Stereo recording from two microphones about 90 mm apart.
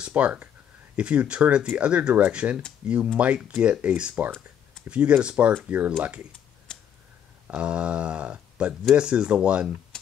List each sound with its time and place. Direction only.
0.0 s speech: 15° right (ahead or behind)
6.7 s a sound: 10° left (ahead or behind)
7.4 s speech: 15° right (ahead or behind)